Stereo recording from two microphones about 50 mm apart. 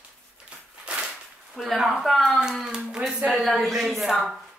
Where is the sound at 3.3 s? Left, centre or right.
Centre.